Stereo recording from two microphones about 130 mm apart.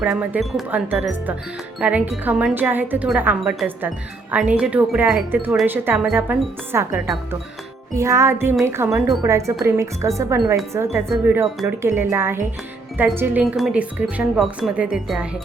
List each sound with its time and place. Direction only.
0.0 s speech: 10° right (ahead or behind)
7.9 s speech: 20° right (ahead or behind); by 15.3 s 5° right (ahead or behind)